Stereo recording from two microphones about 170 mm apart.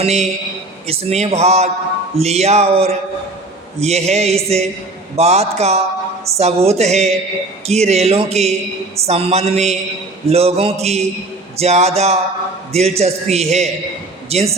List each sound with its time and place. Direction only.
0.0 s a man's voice: 40° right (ahead or behind)